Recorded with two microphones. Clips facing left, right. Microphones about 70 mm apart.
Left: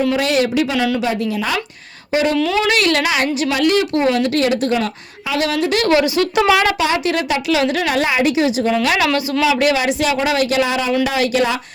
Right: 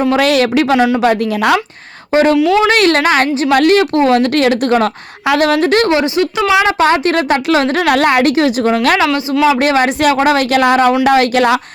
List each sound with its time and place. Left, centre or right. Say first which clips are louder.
0.2 s speech: right 5 dB; right
2.1 s a woman's voice: right 6 dB; right
5.9 s speech: right 2 dB; right
6.7 s a woman's voice: right 5 dB; right